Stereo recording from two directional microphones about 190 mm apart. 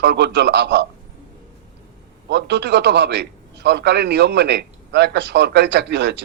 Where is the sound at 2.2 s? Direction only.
65° right (ahead or behind).